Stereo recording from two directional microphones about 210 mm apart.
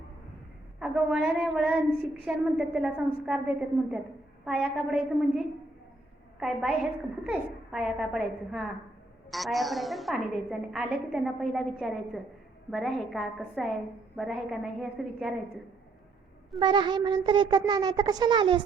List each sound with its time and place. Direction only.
0.8 s a woman's voice: 5° right (ahead or behind)
16.6 s speech: 20° right (ahead or behind)